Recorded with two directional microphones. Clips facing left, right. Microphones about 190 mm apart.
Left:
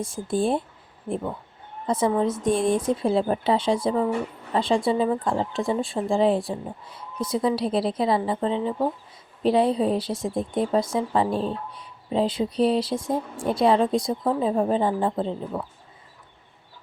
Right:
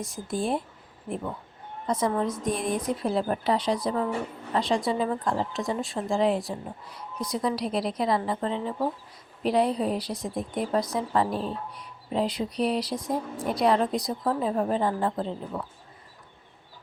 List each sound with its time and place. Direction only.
0.0 s a woman's voice: 30° left (ahead or behind)